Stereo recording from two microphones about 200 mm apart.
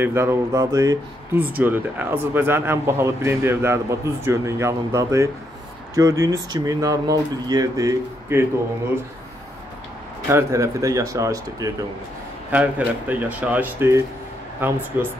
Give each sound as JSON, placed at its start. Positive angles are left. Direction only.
{"t": 0.0, "sound": "speech", "side_deg": -15}
{"t": 10.2, "sound": "speech", "side_deg": -15}